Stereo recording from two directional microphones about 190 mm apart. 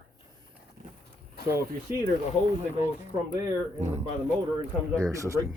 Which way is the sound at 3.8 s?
35° right (ahead or behind).